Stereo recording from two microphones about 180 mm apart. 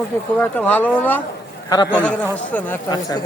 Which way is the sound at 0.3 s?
10° left (ahead or behind).